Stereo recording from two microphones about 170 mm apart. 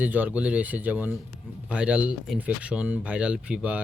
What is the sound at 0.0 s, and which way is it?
Speech, 10° right (ahead or behind).